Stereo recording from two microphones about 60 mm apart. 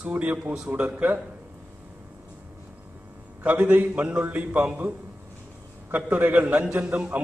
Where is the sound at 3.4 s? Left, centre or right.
Right.